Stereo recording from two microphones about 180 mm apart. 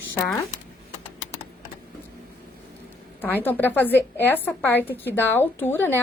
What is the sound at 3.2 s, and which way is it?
A woman's voice, 10° left (ahead or behind).